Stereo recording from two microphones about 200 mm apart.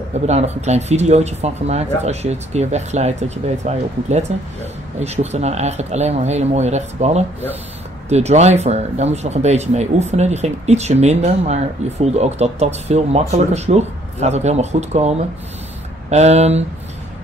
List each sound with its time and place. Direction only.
0.3 s speech: 35° right (ahead or behind)